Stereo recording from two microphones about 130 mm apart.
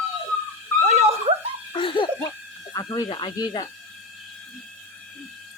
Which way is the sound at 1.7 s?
40° left (ahead or behind).